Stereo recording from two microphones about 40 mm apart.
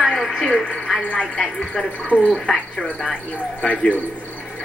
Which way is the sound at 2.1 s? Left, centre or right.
Right.